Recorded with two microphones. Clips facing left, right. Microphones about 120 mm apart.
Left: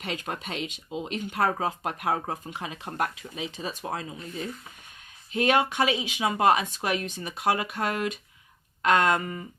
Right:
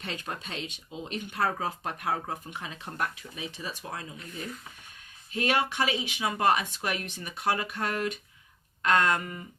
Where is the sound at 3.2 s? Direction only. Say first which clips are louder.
Left 4 dB; 20° left (ahead or behind).